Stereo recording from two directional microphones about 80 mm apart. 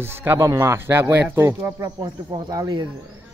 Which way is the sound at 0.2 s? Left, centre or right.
Right.